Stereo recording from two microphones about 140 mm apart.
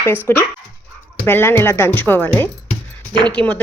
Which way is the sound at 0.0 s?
15° left (ahead or behind).